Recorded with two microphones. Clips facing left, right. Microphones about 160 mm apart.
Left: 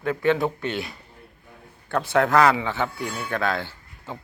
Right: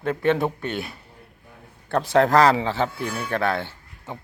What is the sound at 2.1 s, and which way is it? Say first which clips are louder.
Speech: right 2 dB; 35° right (ahead or behind).